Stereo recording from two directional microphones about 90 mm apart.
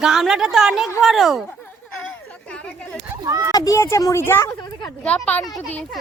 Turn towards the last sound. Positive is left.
turn(degrees=15)  # may be behind; listen again after turning